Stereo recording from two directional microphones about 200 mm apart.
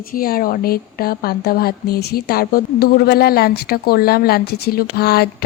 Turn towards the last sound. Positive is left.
turn(degrees=50)  # may be behind; listen again after turning